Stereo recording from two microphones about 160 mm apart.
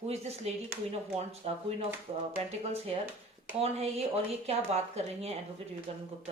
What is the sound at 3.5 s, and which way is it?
Speech, 40° right (ahead or behind).